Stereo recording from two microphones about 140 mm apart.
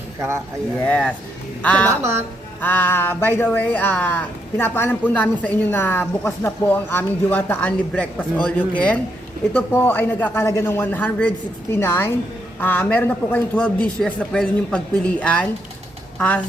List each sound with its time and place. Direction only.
0.2 s speech: 20° right (ahead or behind)
0.9 s speech: 10° left (ahead or behind)
2.0 s speech: 20° right (ahead or behind)
2.6 s speech: 10° left (ahead or behind)